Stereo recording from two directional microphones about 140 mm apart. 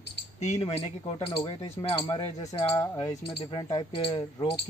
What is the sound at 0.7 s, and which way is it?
Speech, 40° left (ahead or behind).